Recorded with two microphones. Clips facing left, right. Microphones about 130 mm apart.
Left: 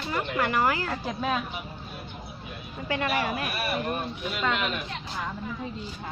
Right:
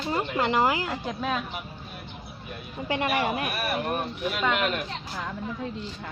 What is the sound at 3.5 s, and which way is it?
Speech, 55° right (ahead or behind).